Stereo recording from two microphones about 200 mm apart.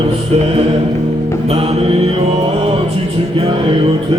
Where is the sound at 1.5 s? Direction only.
30° right (ahead or behind).